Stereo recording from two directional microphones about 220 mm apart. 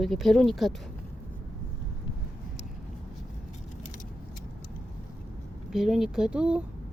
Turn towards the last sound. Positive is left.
turn(degrees=-5)  # may be behind; listen again after turning